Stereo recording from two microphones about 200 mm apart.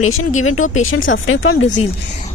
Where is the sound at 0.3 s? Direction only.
90° left.